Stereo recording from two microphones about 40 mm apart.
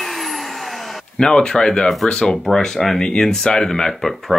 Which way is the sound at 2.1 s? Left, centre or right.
Left.